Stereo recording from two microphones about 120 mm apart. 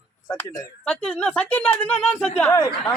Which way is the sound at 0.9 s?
10° left (ahead or behind).